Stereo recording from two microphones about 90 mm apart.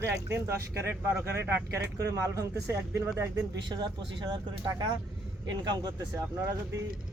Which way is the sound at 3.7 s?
60° right (ahead or behind).